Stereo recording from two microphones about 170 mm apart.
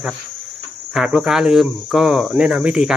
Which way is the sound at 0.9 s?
5° right (ahead or behind).